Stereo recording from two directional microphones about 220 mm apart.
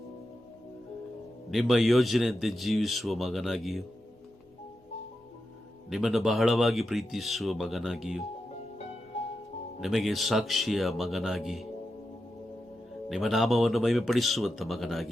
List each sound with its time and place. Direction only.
1.5 s a man's voice: centre (ahead or behind)
5.9 s a man's voice: centre (ahead or behind)
9.1 s music: 25° left (ahead or behind)
9.8 s a man's voice: centre (ahead or behind)
13.1 s a man's voice: centre (ahead or behind)